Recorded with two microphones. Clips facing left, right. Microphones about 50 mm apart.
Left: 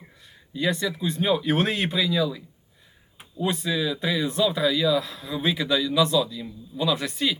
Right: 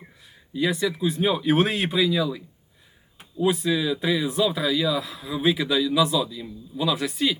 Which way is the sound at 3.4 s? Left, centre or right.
Centre.